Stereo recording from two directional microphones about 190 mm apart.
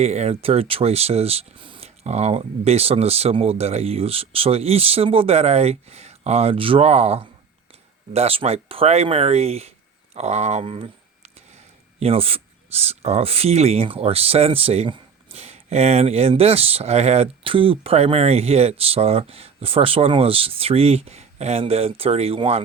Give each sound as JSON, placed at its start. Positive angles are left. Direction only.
{"t": 0.0, "sound": "speech", "side_deg": -35}